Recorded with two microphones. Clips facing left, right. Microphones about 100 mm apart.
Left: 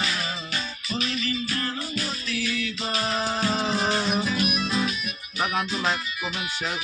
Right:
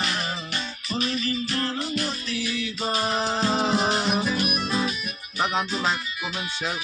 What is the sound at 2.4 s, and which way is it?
Music, 20° right (ahead or behind).